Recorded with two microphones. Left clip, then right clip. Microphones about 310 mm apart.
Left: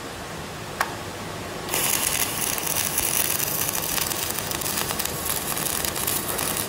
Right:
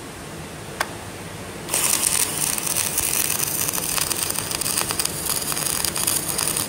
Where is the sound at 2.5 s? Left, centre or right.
Centre.